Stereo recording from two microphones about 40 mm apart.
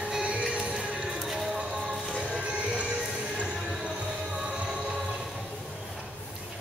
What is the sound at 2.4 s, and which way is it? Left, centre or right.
Music, right.